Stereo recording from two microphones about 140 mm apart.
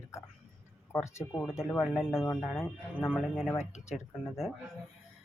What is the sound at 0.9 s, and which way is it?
Speech, 20° left (ahead or behind).